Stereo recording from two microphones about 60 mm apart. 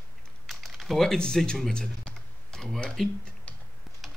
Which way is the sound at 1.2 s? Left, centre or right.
Centre.